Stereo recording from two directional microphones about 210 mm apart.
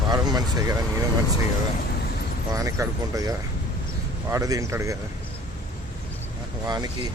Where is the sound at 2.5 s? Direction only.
15° right (ahead or behind).